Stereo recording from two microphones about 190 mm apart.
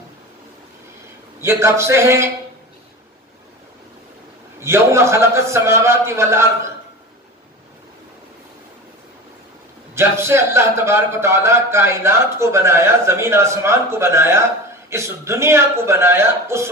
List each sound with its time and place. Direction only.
1.4 s a man's voice: 15° right (ahead or behind)
4.6 s a man's voice: 15° right (ahead or behind)
9.9 s a man's voice: 15° right (ahead or behind)